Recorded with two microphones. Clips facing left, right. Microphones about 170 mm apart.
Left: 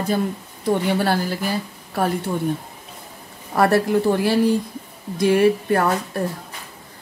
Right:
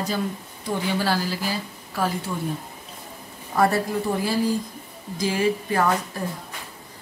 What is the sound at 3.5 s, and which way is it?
Speech, 70° left (ahead or behind).